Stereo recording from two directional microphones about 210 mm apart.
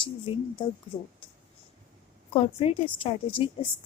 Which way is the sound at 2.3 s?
25° left (ahead or behind).